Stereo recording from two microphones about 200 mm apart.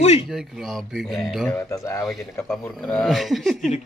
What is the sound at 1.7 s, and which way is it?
Speech, 15° left (ahead or behind).